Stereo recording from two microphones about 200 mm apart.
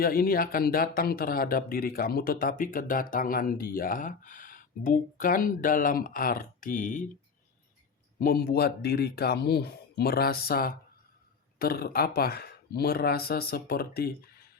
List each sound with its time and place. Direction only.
0.0 s speech: 50° left (ahead or behind)
8.2 s speech: 50° left (ahead or behind)